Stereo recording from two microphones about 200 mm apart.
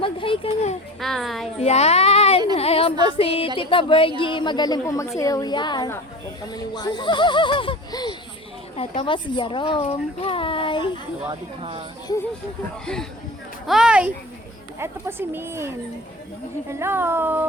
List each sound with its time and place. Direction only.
0.0 s speech: 25° left (ahead or behind)
0.9 s a child's voice: centre (ahead or behind)
1.5 s a sound: 30° left (ahead or behind)
2.6 s speech: 30° left (ahead or behind)
11.3 s speech: 25° right (ahead or behind)
12.8 s a child's voice: 5° left (ahead or behind)